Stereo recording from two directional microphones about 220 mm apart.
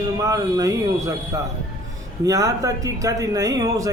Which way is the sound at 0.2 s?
15° right (ahead or behind).